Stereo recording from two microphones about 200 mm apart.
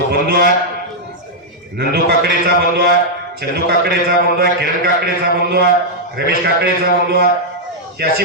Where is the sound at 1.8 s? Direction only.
50° right (ahead or behind).